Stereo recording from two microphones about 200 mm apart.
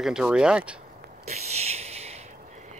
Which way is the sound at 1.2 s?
35° right (ahead or behind).